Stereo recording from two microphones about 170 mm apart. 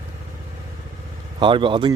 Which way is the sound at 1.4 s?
30° right (ahead or behind).